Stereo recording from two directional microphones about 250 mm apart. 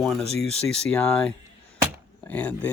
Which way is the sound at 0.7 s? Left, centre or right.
Centre.